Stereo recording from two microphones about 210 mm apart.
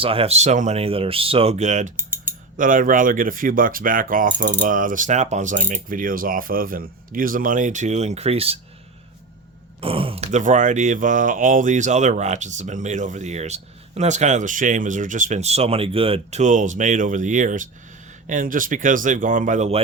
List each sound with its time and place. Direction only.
0.0 s speech: 25° right (ahead or behind)
2.0 s typing: 10° right (ahead or behind)
2.6 s speech: 40° right (ahead or behind)
9.8 s speech: 25° right (ahead or behind)